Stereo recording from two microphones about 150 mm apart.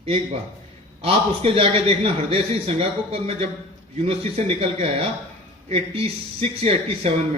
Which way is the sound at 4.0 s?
40° right (ahead or behind).